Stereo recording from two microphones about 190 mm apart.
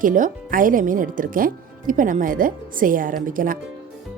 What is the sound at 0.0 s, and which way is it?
Speech, 45° right (ahead or behind).